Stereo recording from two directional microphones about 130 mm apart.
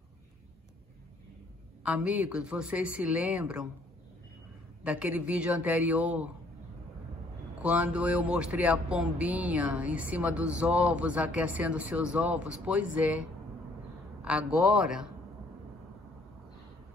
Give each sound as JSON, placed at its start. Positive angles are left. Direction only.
{"t": 1.8, "sound": "speech", "side_deg": -10}
{"t": 4.8, "sound": "speech", "side_deg": -10}
{"t": 7.6, "sound": "speech", "side_deg": -10}
{"t": 14.2, "sound": "speech", "side_deg": -10}